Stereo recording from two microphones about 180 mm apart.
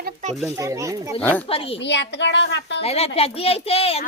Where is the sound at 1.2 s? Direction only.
10° left (ahead or behind).